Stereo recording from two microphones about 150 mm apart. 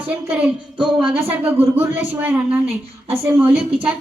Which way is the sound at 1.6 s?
10° right (ahead or behind).